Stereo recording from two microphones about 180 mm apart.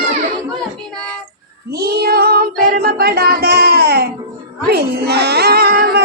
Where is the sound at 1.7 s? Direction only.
60° right (ahead or behind).